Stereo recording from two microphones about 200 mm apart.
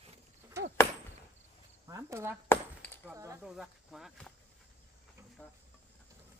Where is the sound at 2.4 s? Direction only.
10° left (ahead or behind).